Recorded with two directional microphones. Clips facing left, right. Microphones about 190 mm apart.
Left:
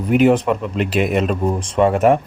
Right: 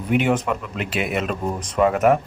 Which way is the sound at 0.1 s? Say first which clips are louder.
Left 6 dB; 40° left (ahead or behind).